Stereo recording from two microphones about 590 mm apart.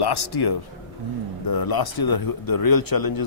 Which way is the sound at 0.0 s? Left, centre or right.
Left.